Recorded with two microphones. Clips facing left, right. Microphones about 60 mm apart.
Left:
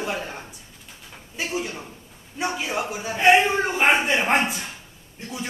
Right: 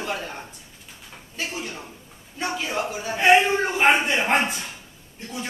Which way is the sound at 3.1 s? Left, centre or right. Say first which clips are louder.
Even; centre.